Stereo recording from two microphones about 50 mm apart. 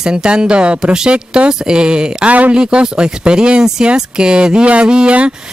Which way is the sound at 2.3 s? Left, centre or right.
Right.